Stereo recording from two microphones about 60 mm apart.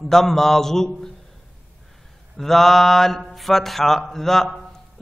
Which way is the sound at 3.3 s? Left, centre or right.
Centre.